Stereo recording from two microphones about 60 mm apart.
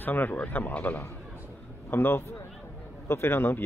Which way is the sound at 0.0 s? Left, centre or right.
Left.